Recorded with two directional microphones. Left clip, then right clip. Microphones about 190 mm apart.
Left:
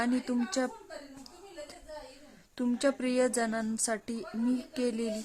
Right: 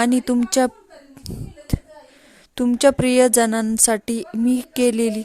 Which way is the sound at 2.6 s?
40° right (ahead or behind).